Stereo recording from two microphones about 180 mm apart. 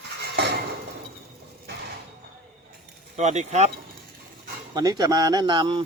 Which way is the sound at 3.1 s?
40° right (ahead or behind).